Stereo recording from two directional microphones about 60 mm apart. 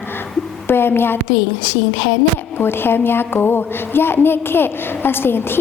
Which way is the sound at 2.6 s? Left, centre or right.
Left.